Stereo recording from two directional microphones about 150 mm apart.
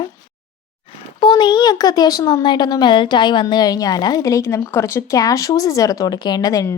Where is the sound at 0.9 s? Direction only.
30° left (ahead or behind).